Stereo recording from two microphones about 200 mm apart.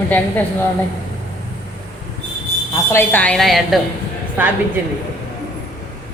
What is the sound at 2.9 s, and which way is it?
A woman's voice, 10° left (ahead or behind).